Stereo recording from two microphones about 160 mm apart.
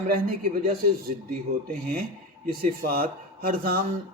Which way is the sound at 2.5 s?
65° right (ahead or behind).